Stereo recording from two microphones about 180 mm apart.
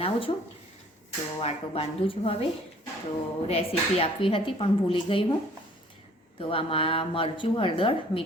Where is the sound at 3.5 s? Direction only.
35° left (ahead or behind).